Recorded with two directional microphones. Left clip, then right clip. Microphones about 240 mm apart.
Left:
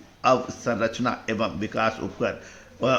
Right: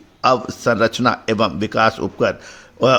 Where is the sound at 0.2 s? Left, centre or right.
Right.